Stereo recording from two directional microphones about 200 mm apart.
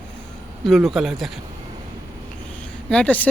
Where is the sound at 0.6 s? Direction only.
Centre (ahead or behind).